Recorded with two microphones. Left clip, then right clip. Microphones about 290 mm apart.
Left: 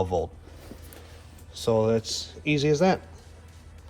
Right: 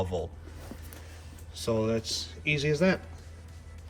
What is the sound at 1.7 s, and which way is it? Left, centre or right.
Speech, centre.